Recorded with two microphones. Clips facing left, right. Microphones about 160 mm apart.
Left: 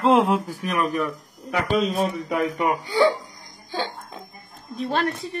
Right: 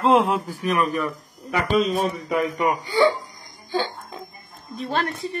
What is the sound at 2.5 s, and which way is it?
Speech, centre (ahead or behind).